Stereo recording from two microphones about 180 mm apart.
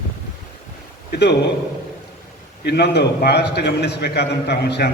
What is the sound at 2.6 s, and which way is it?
A man's voice, 65° left (ahead or behind).